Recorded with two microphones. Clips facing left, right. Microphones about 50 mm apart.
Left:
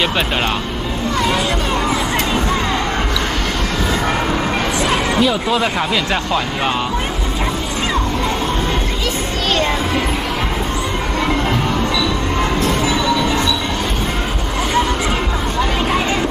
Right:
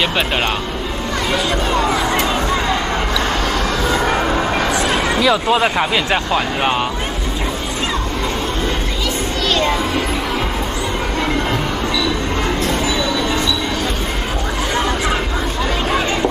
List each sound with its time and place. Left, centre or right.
5.5 s speech: centre